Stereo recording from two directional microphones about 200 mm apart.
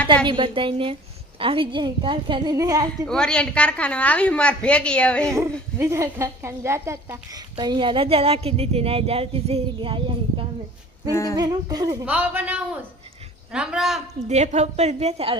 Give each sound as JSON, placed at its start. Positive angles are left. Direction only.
{"t": 0.3, "sound": "a woman's voice", "side_deg": -25}
{"t": 3.1, "sound": "a woman's voice", "side_deg": 5}
{"t": 5.8, "sound": "a woman's voice", "side_deg": -15}
{"t": 11.1, "sound": "humming", "side_deg": 15}
{"t": 11.3, "sound": "a woman's voice", "side_deg": -20}
{"t": 14.3, "sound": "a woman's voice", "side_deg": -35}